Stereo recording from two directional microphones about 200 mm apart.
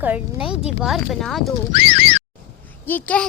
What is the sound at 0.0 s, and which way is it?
Speech, 5° right (ahead or behind).